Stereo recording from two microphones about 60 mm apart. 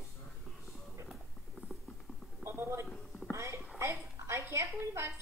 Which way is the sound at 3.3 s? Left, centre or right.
Right.